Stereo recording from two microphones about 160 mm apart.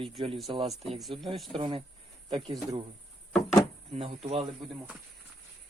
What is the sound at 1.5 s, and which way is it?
Speech, 30° right (ahead or behind).